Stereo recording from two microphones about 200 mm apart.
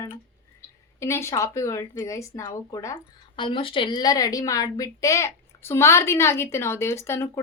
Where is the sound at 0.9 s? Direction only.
15° left (ahead or behind).